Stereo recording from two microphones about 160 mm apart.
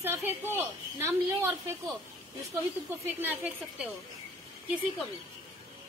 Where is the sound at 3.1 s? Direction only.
10° right (ahead or behind).